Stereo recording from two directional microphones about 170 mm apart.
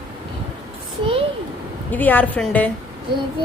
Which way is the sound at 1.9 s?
10° left (ahead or behind).